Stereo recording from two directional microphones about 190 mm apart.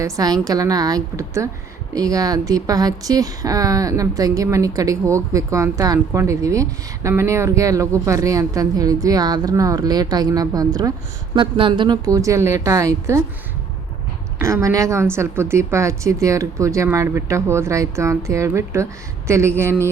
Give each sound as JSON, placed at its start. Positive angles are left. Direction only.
{"t": 0.0, "sound": "a woman's voice", "side_deg": -20}
{"t": 14.3, "sound": "speech", "side_deg": -15}